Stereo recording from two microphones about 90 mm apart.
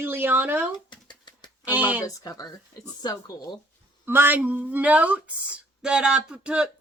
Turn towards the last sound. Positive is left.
turn(degrees=-10)  # may be behind; listen again after turning